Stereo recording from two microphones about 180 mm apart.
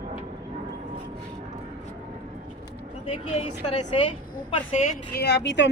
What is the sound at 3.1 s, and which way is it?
A woman's voice, 35° left (ahead or behind).